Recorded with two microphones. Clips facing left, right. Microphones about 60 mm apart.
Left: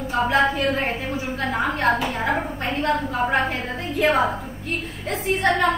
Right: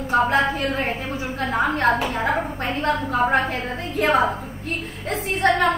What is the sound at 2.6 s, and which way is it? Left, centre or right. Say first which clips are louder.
Speech: even; right.